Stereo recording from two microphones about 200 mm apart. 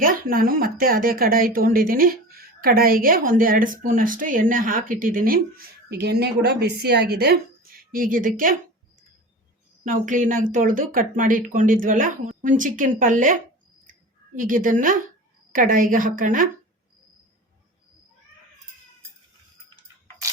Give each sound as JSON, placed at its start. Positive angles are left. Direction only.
{"t": 0.0, "sound": "speech", "side_deg": -45}
{"t": 9.8, "sound": "speech", "side_deg": -40}